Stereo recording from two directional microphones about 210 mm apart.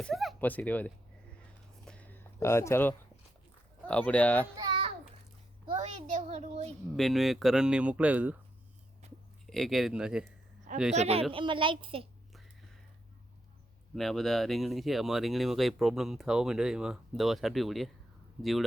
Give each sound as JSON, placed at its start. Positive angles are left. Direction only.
{"t": 0.0, "sound": "speech", "side_deg": 0}
{"t": 1.8, "sound": "a sound", "side_deg": 5}
{"t": 3.8, "sound": "speech", "side_deg": 5}
{"t": 4.5, "sound": "babbling", "side_deg": -20}
{"t": 5.6, "sound": "a child's voice", "side_deg": -30}
{"t": 6.9, "sound": "speech", "side_deg": 0}
{"t": 9.5, "sound": "speech", "side_deg": 0}
{"t": 10.9, "sound": "a woman's voice", "side_deg": -30}
{"t": 13.9, "sound": "speech", "side_deg": 0}